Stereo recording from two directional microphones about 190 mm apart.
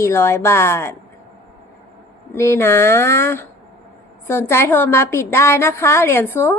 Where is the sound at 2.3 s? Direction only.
15° left (ahead or behind).